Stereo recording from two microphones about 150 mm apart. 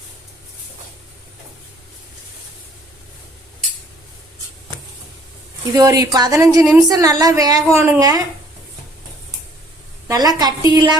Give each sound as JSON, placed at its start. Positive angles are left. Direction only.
{"t": 5.7, "sound": "a woman's voice", "side_deg": -25}
{"t": 10.1, "sound": "a woman's voice", "side_deg": -25}